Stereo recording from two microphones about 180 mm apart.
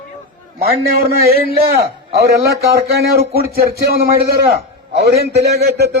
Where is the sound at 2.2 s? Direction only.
60° right (ahead or behind).